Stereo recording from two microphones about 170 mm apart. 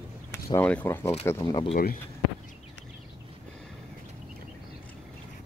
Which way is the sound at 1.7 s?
55° left (ahead or behind).